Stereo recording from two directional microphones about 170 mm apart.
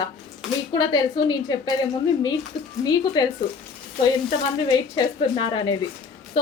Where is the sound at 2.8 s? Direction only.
25° left (ahead or behind).